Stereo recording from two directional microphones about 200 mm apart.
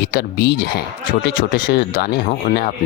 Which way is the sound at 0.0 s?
50° left (ahead or behind).